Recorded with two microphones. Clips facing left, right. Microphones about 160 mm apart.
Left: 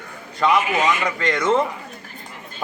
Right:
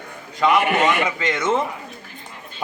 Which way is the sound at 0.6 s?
65° right (ahead or behind).